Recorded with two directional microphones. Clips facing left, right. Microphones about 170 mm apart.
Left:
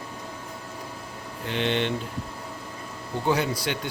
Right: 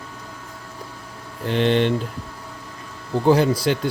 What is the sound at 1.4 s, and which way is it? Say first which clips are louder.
Speech: right 7 dB; 40° right (ahead or behind).